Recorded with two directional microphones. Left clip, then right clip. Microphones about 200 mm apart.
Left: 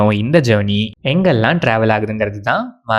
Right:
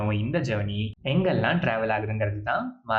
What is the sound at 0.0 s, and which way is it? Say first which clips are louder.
Speech: left 15 dB; 50° left (ahead or behind).